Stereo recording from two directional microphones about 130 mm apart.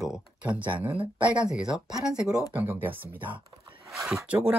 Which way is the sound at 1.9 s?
5° right (ahead or behind).